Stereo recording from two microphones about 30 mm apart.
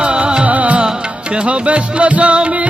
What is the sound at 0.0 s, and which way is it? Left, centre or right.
Music, right.